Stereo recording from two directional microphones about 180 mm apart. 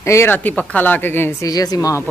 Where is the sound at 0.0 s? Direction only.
15° left (ahead or behind).